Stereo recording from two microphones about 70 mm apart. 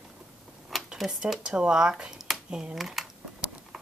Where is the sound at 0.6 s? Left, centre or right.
Centre.